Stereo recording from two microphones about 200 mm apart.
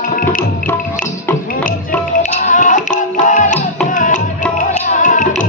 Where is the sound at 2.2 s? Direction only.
40° left (ahead or behind).